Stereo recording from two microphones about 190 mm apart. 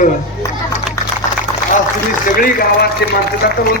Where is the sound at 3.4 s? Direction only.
50° left (ahead or behind).